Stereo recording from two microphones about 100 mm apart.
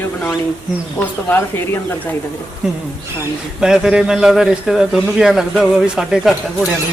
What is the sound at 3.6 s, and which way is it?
A man's voice, 5° right (ahead or behind).